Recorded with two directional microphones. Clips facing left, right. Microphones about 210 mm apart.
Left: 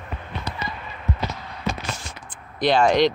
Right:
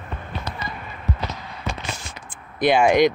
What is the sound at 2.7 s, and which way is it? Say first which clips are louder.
Speech: right 1 dB; 10° right (ahead or behind).